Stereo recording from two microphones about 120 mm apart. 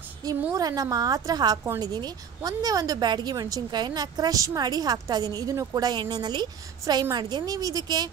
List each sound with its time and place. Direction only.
0.5 s speech: 30° right (ahead or behind)